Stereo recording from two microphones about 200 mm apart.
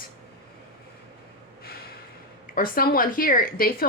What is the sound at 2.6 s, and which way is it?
Speech, 45° left (ahead or behind).